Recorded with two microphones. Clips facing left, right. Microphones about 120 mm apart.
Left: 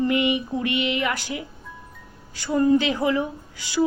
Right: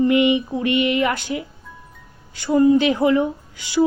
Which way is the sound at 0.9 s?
25° right (ahead or behind).